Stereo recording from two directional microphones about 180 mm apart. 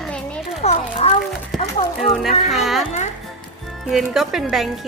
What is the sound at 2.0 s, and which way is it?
Speech, centre (ahead or behind).